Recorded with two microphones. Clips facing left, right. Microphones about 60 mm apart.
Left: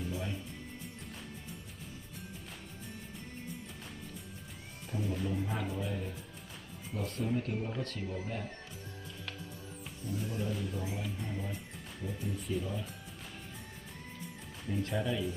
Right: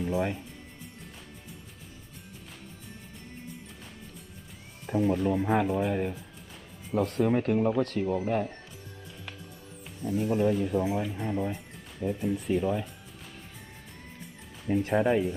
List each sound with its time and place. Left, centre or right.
0.0 s speech: right
4.9 s speech: right
10.0 s speech: right
11.1 s speech: right
14.8 s speech: right